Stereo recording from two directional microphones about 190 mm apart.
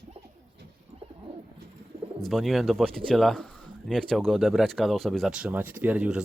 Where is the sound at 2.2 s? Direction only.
Centre (ahead or behind).